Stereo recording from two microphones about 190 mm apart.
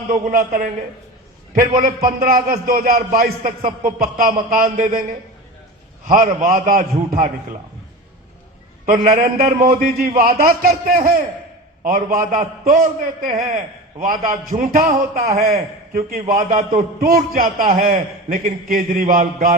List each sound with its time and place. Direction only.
0.1 s a man's voice: 45° right (ahead or behind)
1.8 s a man's voice: 50° right (ahead or behind)
6.1 s a man's voice: 45° right (ahead or behind)
8.9 s a man's voice: 50° right (ahead or behind)